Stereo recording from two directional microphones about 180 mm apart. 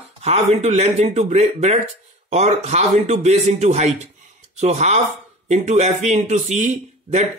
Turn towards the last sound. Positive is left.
turn(degrees=-40)  # may be behind; listen again after turning